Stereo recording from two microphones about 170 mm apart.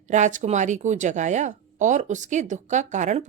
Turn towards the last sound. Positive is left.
turn(degrees=-45)  # may be behind; listen again after turning